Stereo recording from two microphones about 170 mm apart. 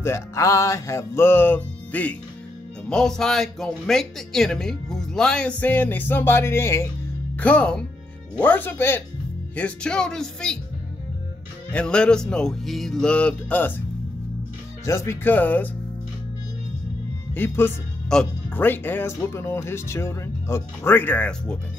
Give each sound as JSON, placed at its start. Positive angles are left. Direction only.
{"t": 0.0, "sound": "speech", "side_deg": 15}
{"t": 11.7, "sound": "speech", "side_deg": 5}
{"t": 14.9, "sound": "speech", "side_deg": 15}
{"t": 17.3, "sound": "speech", "side_deg": 10}